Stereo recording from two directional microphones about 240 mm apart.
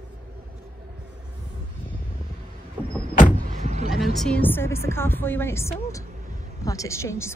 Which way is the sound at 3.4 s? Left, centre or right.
Right.